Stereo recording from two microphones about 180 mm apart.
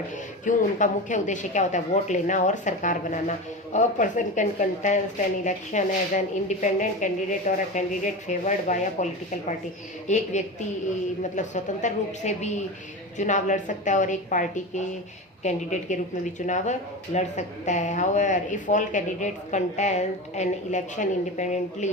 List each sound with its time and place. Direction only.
0.4 s a woman's voice: 45° left (ahead or behind)
10.1 s a woman's voice: 40° left (ahead or behind)